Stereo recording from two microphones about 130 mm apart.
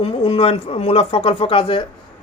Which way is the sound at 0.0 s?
45° left (ahead or behind).